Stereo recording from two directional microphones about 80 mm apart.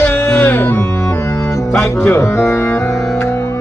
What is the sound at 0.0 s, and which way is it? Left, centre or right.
Music, left.